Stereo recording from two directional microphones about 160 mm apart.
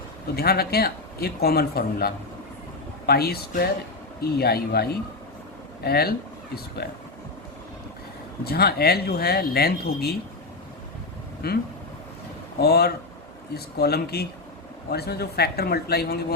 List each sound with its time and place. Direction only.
0.3 s speech: 75° left (ahead or behind)
8.4 s speech: 75° left (ahead or behind)
11.4 s speech: 80° left